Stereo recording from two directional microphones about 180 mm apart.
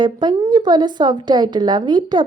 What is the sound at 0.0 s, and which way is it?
A woman's voice, 25° right (ahead or behind).